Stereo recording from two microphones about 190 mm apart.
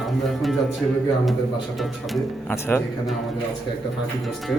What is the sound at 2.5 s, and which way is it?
Speech, 10° left (ahead or behind).